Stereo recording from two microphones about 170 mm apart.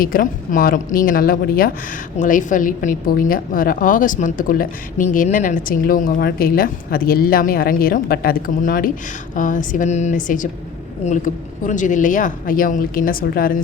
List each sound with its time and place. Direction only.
0.0 s a woman's voice: 55° left (ahead or behind)
11.6 s a woman's voice: 50° left (ahead or behind)